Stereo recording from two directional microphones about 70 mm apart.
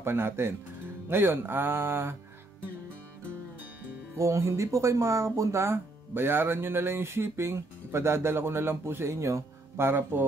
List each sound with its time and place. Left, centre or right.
0.0 s speech: right
4.2 s speech: right